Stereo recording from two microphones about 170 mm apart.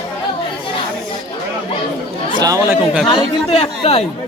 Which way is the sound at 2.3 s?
20° right (ahead or behind).